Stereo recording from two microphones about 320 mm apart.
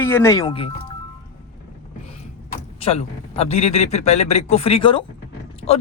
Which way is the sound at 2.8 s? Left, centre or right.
Centre.